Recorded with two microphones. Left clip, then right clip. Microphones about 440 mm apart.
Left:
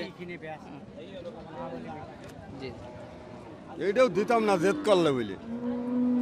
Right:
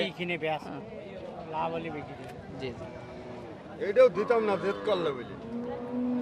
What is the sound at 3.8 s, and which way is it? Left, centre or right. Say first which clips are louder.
A man's voice: right 2 dB; left.